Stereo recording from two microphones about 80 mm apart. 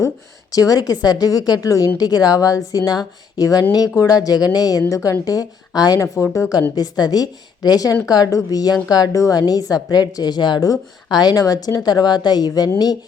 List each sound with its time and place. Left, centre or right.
0.5 s speech: left
4.9 s a woman's voice: left
5.2 s speech: left
6.0 s a woman's voice: left
6.5 s a woman's voice: left